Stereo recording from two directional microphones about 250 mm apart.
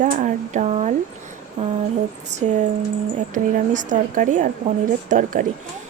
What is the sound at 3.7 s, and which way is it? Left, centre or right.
A woman's voice, right.